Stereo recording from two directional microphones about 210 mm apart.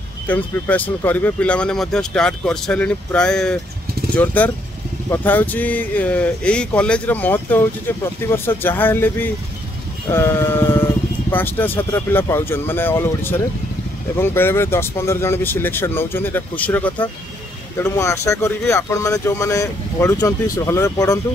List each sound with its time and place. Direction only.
0.3 s speech: 10° left (ahead or behind)